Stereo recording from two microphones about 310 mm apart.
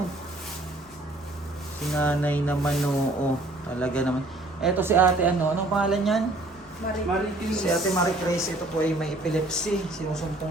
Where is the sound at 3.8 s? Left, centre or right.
Centre.